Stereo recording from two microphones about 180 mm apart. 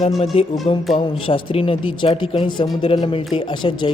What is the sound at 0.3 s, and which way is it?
A man's voice, 30° left (ahead or behind).